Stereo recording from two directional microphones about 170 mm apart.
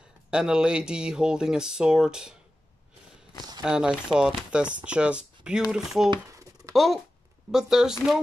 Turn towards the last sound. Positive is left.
turn(degrees=-5)  # may be behind; listen again after turning